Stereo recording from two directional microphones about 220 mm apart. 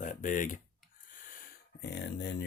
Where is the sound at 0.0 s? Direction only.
35° left (ahead or behind).